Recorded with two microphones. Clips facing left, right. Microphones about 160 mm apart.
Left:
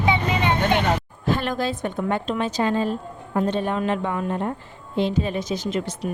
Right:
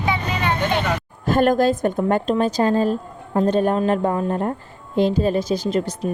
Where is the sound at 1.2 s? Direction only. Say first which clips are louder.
Right 9 dB; 45° right (ahead or behind).